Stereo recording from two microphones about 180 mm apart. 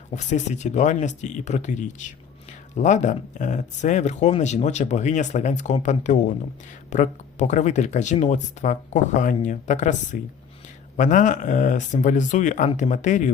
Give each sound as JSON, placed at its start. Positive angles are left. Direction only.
{"t": 0.1, "sound": "speech", "side_deg": 40}